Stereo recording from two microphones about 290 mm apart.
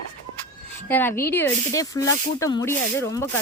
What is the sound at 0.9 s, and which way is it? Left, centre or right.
A woman's voice, centre.